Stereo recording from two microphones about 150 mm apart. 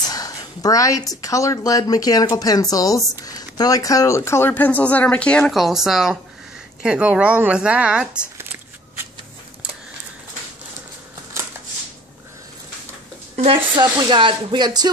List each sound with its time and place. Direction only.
0.1 s speech: 25° left (ahead or behind); by 8.5 s 10° right (ahead or behind)
13.7 s speech: 30° right (ahead or behind)